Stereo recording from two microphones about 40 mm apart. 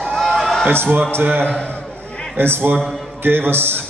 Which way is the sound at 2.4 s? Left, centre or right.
Right.